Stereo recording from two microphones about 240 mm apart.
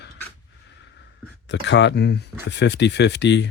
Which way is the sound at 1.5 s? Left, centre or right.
Left.